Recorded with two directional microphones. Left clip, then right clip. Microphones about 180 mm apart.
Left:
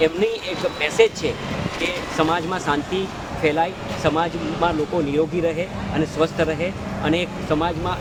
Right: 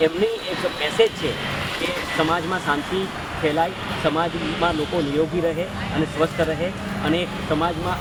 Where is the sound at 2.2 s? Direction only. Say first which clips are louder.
Left 2 dB; 20° left (ahead or behind).